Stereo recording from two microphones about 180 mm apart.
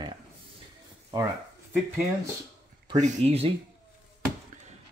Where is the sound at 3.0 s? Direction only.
40° right (ahead or behind).